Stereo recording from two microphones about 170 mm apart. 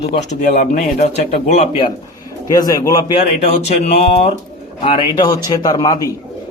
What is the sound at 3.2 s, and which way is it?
Speech, 40° left (ahead or behind).